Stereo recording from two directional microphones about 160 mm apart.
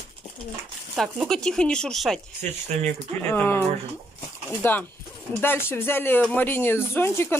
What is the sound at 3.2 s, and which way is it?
Speech, 10° left (ahead or behind).